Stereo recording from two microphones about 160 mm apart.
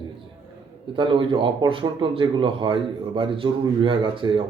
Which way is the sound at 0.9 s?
30° right (ahead or behind).